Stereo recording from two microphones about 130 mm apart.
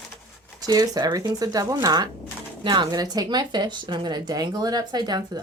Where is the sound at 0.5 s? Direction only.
30° right (ahead or behind).